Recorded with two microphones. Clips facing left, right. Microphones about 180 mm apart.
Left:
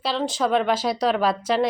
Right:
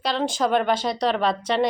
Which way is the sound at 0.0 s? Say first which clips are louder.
Even; centre (ahead or behind).